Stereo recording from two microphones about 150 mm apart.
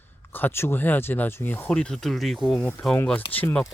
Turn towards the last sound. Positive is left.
turn(degrees=10)  # may be behind; listen again after turning